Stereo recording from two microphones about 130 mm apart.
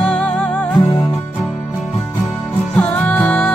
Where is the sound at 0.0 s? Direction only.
10° left (ahead or behind).